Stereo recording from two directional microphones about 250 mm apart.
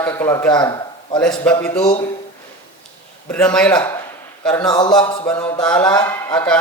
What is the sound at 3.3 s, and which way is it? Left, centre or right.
A man's voice, centre.